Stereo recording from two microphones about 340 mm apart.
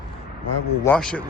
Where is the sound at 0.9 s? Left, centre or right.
Centre.